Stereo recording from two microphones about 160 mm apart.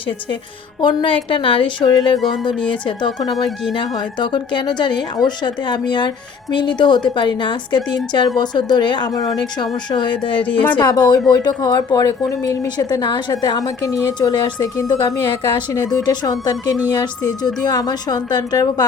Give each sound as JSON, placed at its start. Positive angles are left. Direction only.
{"t": 0.8, "sound": "a woman's voice", "side_deg": 30}
{"t": 10.4, "sound": "speech", "side_deg": 10}
{"t": 10.8, "sound": "a woman's voice", "side_deg": 25}